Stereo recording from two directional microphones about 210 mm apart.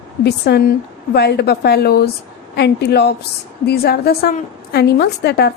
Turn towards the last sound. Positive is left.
turn(degrees=50)  # may be behind; listen again after turning